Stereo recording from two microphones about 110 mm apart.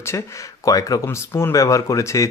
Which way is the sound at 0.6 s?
35° left (ahead or behind).